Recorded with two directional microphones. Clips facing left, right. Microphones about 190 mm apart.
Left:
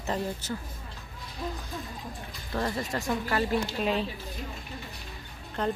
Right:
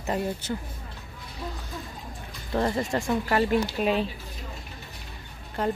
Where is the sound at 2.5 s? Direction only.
25° right (ahead or behind).